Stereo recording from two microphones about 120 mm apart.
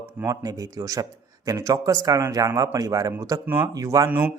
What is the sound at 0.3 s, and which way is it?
Speech, 30° right (ahead or behind).